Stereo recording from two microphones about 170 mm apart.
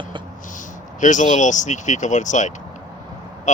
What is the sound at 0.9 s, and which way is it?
Mantra, 45° left (ahead or behind).